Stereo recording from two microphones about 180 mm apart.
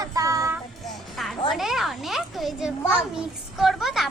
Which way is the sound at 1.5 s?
Centre (ahead or behind).